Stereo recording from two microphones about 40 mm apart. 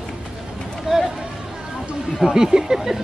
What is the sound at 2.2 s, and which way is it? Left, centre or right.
Speech, centre.